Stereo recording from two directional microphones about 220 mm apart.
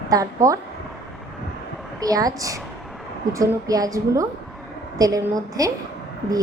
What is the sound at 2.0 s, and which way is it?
A woman's voice, 15° right (ahead or behind).